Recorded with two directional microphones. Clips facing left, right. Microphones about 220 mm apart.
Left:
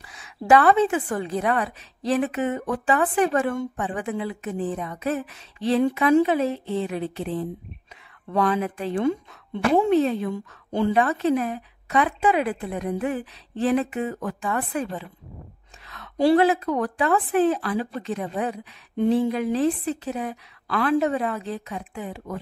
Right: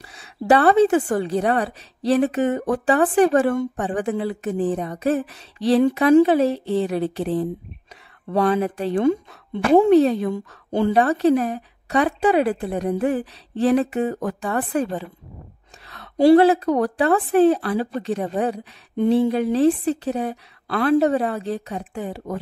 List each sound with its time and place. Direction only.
0.0 s a woman's voice: 30° right (ahead or behind)
4.2 s a woman's voice: 35° right (ahead or behind)